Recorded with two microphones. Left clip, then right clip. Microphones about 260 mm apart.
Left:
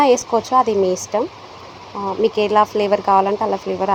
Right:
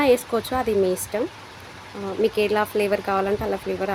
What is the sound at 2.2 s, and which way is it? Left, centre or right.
Speech, centre.